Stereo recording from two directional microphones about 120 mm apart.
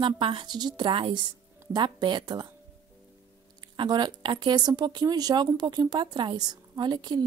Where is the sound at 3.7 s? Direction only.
40° right (ahead or behind).